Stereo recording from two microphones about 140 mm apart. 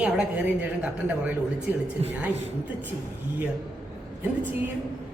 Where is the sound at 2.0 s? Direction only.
45° right (ahead or behind).